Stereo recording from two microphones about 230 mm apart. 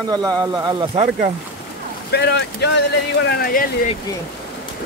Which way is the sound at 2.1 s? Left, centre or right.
Left.